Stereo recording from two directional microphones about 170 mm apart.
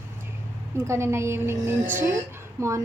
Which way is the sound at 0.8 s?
15° right (ahead or behind).